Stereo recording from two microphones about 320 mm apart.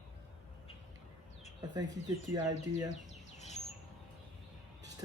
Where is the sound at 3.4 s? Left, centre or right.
Left.